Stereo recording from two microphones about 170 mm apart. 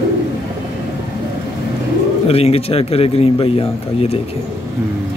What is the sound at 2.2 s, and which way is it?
Speech, 35° left (ahead or behind).